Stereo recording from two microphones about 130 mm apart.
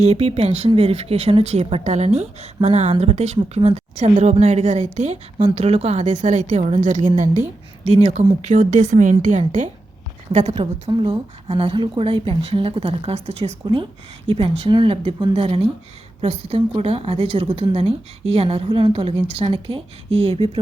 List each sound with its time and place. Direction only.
0.0 s a woman's voice: 55° right (ahead or behind)
7.9 s a woman's voice: 55° right (ahead or behind)
8.4 s a woman's voice: 65° right (ahead or behind)
10.5 s a woman's voice: 40° right (ahead or behind)